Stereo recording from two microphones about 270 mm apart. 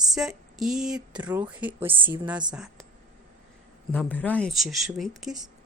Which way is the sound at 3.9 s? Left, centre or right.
Centre.